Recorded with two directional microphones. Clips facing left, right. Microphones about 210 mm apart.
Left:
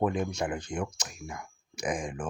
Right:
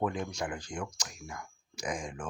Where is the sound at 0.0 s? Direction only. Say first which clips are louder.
Left 4 dB; 20° left (ahead or behind).